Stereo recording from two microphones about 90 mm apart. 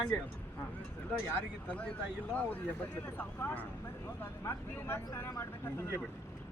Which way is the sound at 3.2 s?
20° left (ahead or behind).